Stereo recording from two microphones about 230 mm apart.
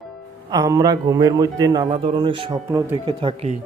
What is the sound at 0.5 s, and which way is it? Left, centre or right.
A man's voice, centre.